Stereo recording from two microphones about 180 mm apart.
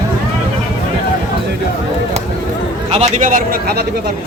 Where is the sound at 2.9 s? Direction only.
40° right (ahead or behind); by 3.8 s 55° right (ahead or behind).